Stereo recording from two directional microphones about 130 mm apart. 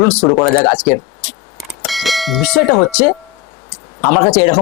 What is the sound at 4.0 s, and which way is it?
Speech, 20° left (ahead or behind).